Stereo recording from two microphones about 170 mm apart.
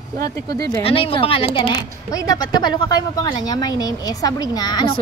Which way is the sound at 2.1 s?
20° left (ahead or behind).